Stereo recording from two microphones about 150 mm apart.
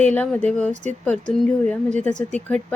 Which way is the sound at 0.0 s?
10° left (ahead or behind).